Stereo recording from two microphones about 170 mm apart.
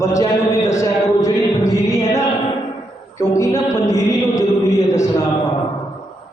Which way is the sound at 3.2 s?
20° left (ahead or behind).